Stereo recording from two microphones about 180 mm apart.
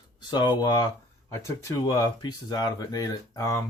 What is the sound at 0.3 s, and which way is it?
Speech, 25° left (ahead or behind).